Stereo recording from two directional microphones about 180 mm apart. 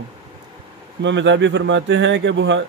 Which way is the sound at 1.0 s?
90° right.